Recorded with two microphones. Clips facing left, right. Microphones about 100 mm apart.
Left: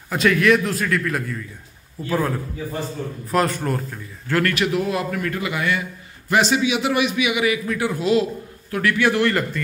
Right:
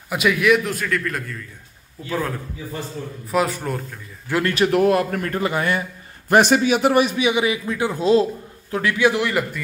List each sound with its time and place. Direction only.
0.1 s a man's voice: 10° right (ahead or behind)
4.3 s speech: 20° right (ahead or behind)
4.6 s a man's voice: 55° right (ahead or behind)
5.2 s a man's voice: 40° right (ahead or behind)
6.2 s a man's voice: 50° right (ahead or behind); by 8.3 s 30° right (ahead or behind)
8.7 s a man's voice: 15° right (ahead or behind)